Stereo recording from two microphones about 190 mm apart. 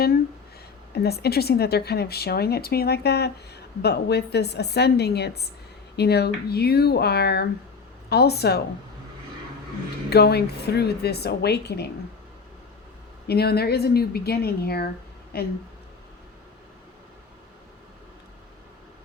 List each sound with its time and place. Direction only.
0.9 s speech: 55° left (ahead or behind)
10.1 s speech: 60° left (ahead or behind)
13.2 s speech: 55° left (ahead or behind)